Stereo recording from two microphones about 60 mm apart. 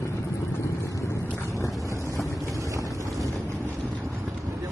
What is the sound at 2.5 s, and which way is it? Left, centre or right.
Boat, right.